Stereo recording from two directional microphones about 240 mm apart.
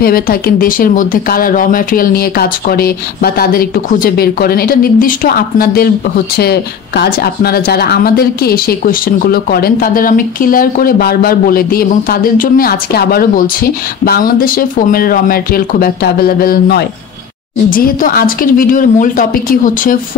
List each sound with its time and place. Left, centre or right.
0.0 s speech: left